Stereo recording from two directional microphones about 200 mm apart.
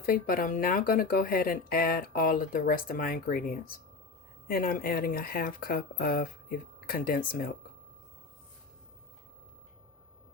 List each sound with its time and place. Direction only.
0.0 s speech: 45° left (ahead or behind)